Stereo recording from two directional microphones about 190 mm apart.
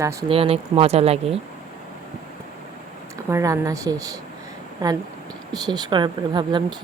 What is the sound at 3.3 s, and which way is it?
Speech, 15° right (ahead or behind).